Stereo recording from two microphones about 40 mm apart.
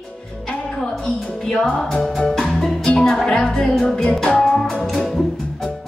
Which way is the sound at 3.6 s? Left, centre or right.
Centre.